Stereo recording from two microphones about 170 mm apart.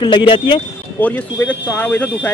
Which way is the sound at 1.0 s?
10° left (ahead or behind).